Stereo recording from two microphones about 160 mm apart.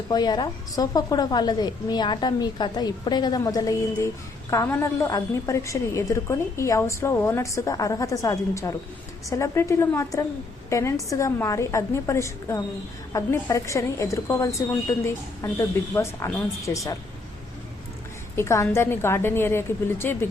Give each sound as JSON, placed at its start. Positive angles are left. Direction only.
{"t": 0.1, "sound": "a woman's voice", "side_deg": 25}
{"t": 18.3, "sound": "a woman's voice", "side_deg": 20}